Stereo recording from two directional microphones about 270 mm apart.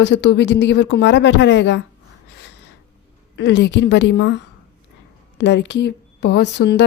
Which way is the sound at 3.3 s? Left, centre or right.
Left.